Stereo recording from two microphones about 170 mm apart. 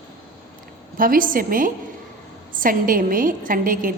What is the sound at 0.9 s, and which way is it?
A woman's voice, 55° right (ahead or behind).